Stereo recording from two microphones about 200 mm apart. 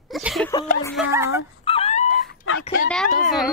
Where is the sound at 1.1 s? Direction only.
15° right (ahead or behind).